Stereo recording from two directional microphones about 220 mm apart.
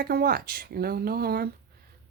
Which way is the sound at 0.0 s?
45° right (ahead or behind).